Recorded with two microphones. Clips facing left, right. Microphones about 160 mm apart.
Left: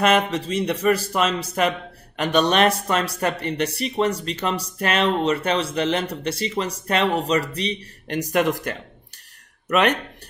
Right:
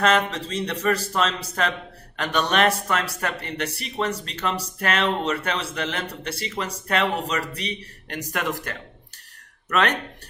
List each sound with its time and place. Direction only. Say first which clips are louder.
0.0 s speech: left 2 dB; 15° left (ahead or behind)